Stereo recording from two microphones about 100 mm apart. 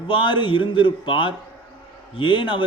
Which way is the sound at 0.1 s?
55° left (ahead or behind).